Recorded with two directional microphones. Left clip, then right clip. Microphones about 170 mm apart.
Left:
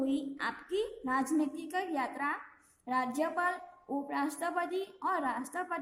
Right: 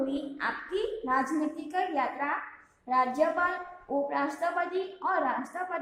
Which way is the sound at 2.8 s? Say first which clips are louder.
Right 7 dB; 45° left (ahead or behind).